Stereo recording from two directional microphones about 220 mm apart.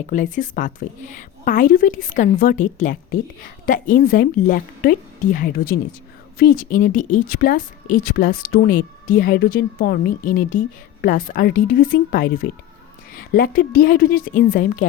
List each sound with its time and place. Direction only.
0.1 s speech: 35° left (ahead or behind)